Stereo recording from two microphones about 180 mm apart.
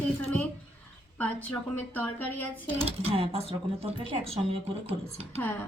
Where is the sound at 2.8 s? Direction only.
35° right (ahead or behind).